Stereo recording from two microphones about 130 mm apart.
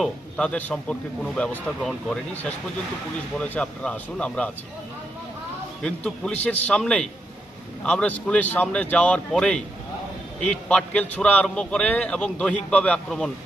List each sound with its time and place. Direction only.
0.0 s a man's voice: 5° left (ahead or behind)
5.8 s a man's voice: 5° left (ahead or behind)